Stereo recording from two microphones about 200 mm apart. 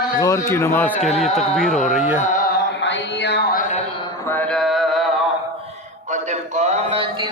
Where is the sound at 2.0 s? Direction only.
10° right (ahead or behind).